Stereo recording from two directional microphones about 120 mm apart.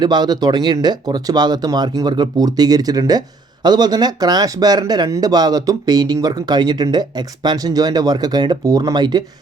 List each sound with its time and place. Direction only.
0.0 s speech: 35° right (ahead or behind)